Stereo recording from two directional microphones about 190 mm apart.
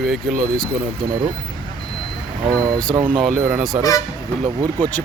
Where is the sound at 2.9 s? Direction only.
25° right (ahead or behind).